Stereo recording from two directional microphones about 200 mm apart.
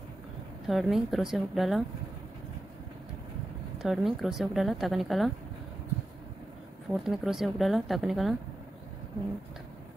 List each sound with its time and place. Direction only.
0.7 s speech: centre (ahead or behind)
3.8 s speech: centre (ahead or behind)
6.9 s speech: centre (ahead or behind)